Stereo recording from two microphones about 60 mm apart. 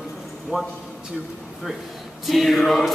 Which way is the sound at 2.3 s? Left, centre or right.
Centre.